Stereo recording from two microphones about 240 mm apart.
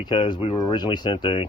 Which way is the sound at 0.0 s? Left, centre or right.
Centre.